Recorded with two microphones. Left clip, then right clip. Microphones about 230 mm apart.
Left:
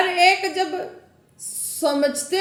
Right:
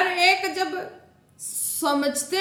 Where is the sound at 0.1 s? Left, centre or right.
Centre.